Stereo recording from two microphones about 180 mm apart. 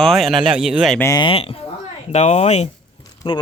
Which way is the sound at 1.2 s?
30° left (ahead or behind).